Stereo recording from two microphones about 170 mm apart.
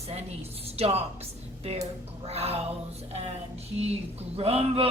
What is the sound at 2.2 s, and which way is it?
Speech, 35° right (ahead or behind).